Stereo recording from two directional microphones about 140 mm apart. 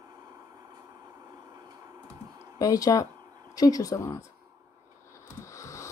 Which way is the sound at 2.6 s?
25° left (ahead or behind).